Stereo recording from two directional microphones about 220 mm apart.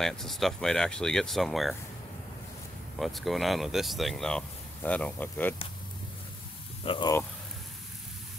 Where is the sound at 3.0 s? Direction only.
Centre (ahead or behind).